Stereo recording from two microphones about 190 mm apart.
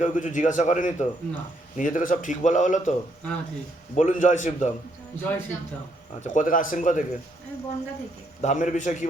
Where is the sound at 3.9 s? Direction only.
40° left (ahead or behind).